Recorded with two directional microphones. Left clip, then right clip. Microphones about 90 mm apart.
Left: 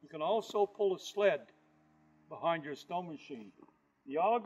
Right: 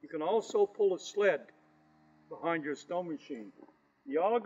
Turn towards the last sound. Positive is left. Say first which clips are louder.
# right 1 dB
turn(degrees=35)  # may be behind; listen again after turning